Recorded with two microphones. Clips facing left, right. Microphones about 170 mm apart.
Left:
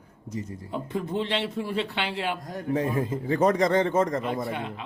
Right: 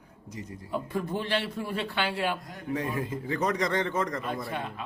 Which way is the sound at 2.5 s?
45° left (ahead or behind).